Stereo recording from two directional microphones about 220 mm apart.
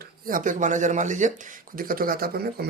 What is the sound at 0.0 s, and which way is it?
Speech, 40° right (ahead or behind).